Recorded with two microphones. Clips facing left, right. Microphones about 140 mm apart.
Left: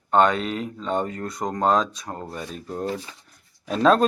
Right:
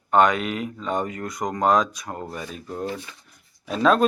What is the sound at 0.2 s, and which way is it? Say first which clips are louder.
Speech: even; 30° left (ahead or behind).